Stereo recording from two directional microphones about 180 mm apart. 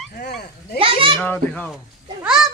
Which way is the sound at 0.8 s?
30° right (ahead or behind).